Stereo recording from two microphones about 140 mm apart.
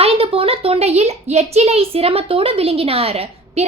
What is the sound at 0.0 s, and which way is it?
A child's voice, 45° right (ahead or behind).